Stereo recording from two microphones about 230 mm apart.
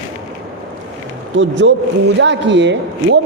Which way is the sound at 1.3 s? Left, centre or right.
Right.